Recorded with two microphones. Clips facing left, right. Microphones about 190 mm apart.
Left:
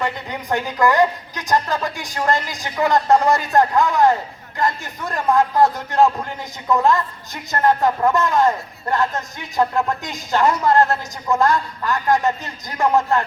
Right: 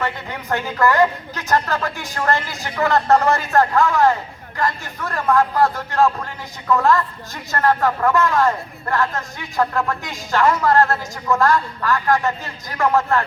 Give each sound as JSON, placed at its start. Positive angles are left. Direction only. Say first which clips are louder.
{"t": 0.5, "sound": "speech", "louder": "left 1 dB", "side_deg": 15}